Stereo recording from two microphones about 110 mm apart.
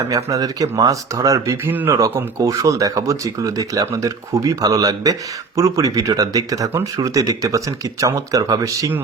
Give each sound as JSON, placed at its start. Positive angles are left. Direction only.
{"t": 0.3, "sound": "speech", "side_deg": -35}
{"t": 1.6, "sound": "speech", "side_deg": -20}
{"t": 2.0, "sound": "speech", "side_deg": -30}